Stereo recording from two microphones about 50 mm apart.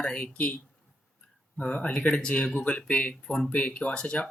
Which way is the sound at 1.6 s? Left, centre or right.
Left.